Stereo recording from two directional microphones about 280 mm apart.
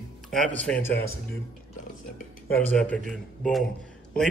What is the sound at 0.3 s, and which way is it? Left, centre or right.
Speech, centre.